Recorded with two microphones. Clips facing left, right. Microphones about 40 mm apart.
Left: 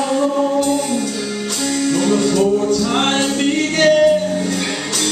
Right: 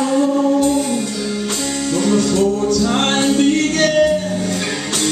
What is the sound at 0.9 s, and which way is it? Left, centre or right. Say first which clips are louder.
Music: even; right.